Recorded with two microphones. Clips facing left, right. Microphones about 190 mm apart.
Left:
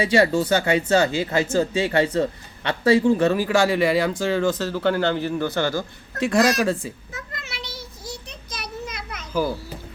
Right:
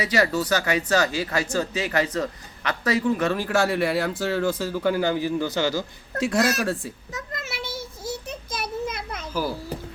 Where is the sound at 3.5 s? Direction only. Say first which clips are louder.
Left 3 dB; centre (ahead or behind).